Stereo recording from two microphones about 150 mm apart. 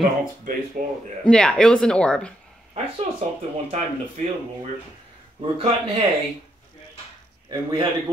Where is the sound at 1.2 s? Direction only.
5° left (ahead or behind).